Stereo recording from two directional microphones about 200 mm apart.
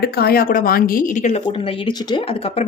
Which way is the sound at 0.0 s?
50° left (ahead or behind).